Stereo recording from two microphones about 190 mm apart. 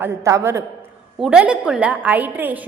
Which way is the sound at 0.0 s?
15° right (ahead or behind).